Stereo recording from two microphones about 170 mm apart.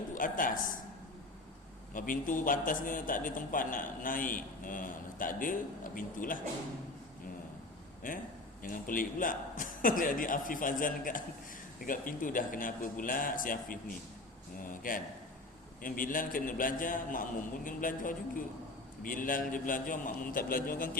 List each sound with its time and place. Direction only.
0.1 s a woman's voice: 50° left (ahead or behind)
1.9 s a man's voice: 50° left (ahead or behind)
8.0 s a man's voice: 55° left (ahead or behind)